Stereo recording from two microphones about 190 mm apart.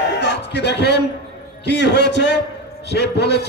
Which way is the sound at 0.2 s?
65° left (ahead or behind).